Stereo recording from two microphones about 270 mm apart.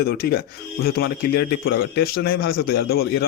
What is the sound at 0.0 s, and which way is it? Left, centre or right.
A man's voice, left.